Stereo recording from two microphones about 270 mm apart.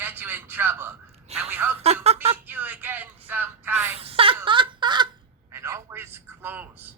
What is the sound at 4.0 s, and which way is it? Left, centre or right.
Speech, right.